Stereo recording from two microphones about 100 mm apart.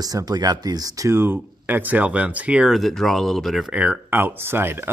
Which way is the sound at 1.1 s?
20° right (ahead or behind).